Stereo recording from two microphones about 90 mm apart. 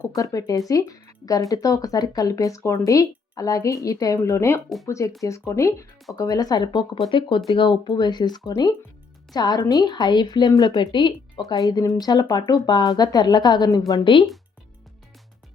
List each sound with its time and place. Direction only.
0.2 s a woman's voice: 40° left (ahead or behind)
7.1 s a woman's voice: 65° left (ahead or behind); by 10.8 s 40° left (ahead or behind)
10.8 s speech: 60° left (ahead or behind)
11.4 s a woman's voice: 45° left (ahead or behind)
13.7 s a woman's voice: 45° left (ahead or behind)
14.0 s speech: 70° left (ahead or behind)